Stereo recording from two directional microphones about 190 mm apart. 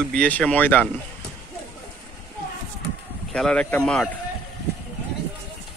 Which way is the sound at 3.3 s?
5° left (ahead or behind).